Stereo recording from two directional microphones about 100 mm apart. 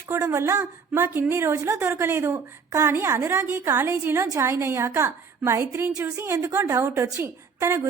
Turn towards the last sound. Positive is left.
turn(degrees=-25)  # may be behind; listen again after turning